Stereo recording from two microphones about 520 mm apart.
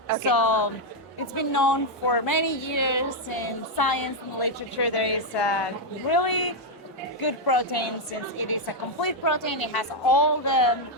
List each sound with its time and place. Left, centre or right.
0.3 s a woman's voice: left